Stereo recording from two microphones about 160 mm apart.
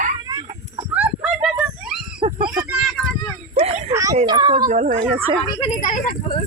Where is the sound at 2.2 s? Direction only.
30° right (ahead or behind).